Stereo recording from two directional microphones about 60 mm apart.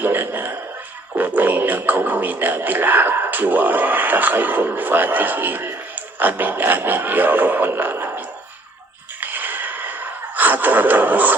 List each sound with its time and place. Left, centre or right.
0.0 s music: right
9.2 s gasp: right